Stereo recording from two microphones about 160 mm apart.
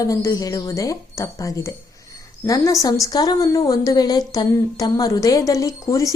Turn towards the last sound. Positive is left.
turn(degrees=20)  # may be behind; listen again after turning